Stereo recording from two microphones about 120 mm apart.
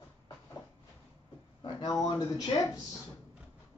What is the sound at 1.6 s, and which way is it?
Speech, 35° left (ahead or behind).